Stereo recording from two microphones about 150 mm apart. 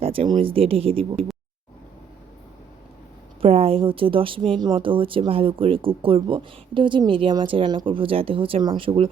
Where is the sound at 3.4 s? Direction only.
40° right (ahead or behind).